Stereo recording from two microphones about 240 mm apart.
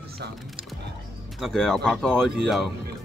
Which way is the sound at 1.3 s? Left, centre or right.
Centre.